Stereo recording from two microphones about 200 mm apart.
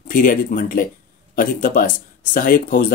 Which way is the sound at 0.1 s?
45° left (ahead or behind).